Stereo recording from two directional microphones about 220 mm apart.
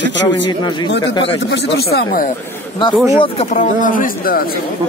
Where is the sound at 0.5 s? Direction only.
20° left (ahead or behind).